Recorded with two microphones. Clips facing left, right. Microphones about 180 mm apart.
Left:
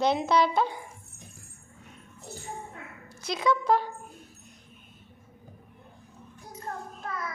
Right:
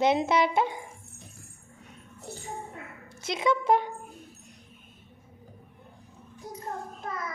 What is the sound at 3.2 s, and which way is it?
Speech, 25° right (ahead or behind).